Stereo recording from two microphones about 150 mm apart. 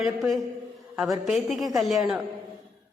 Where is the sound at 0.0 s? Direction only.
Centre (ahead or behind).